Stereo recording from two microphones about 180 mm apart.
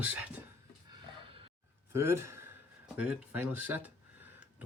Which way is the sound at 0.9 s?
30° right (ahead or behind).